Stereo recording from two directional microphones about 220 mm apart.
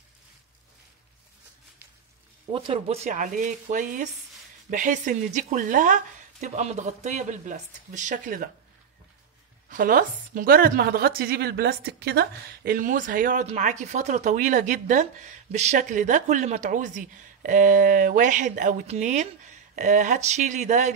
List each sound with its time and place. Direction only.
2.5 s a woman's voice: 25° right (ahead or behind)
9.7 s a woman's voice: 40° right (ahead or behind)